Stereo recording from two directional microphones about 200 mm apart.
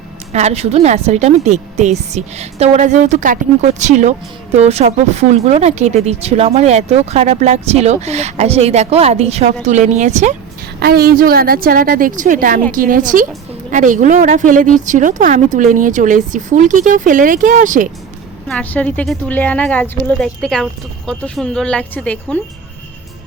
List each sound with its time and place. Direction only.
0.3 s speech: 30° right (ahead or behind)
10.8 s a woman's voice: 50° right (ahead or behind)
18.4 s speech: 5° left (ahead or behind)